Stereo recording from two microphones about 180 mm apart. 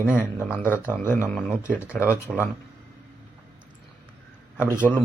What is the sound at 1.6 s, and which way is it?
Speech, 15° left (ahead or behind).